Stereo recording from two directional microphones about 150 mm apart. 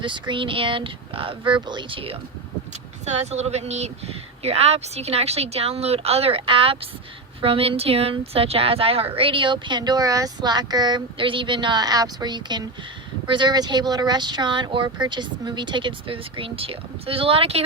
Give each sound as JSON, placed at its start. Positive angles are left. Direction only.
{"t": 0.0, "sound": "a woman's voice", "side_deg": -35}
{"t": 3.1, "sound": "a woman's voice", "side_deg": -45}